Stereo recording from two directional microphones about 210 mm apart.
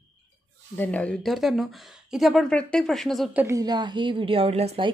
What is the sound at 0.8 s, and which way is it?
Speech, 5° left (ahead or behind).